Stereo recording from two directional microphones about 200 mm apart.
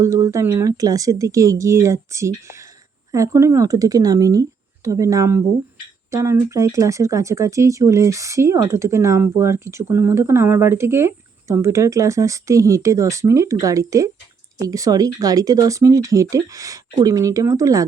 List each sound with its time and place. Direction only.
0.0 s speech: 15° right (ahead or behind)